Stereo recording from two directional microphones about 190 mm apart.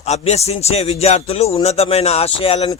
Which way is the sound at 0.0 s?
35° left (ahead or behind).